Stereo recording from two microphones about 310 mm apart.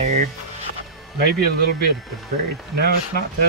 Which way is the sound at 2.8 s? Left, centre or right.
Right.